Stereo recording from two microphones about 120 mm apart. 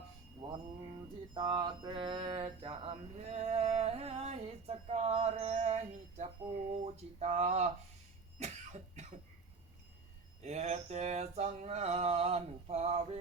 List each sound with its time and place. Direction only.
1.3 s mantra: 40° right (ahead or behind)
3.2 s a sound: 70° right (ahead or behind)
8.4 s cough: 70° right (ahead or behind)
10.4 s mantra: 65° right (ahead or behind)